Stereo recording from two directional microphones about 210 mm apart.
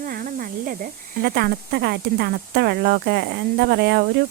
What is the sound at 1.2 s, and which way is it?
Speech, 45° right (ahead or behind).